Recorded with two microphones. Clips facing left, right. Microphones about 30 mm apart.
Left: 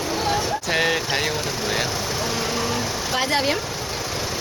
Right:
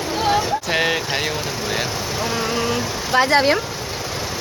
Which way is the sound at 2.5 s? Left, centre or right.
Right.